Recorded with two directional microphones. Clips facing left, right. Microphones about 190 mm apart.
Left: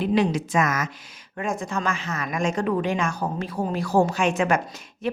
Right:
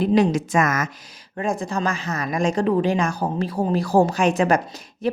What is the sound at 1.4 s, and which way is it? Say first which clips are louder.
A woman's voice: right 3 dB; 35° right (ahead or behind).